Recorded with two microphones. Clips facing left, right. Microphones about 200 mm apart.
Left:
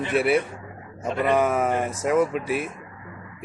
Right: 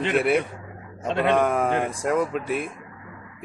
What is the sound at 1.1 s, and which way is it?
Speech, 80° right.